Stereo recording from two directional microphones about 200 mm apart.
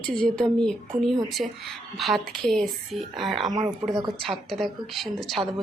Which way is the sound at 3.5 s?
20° right (ahead or behind).